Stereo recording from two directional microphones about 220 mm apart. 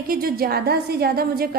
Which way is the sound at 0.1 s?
45° right (ahead or behind).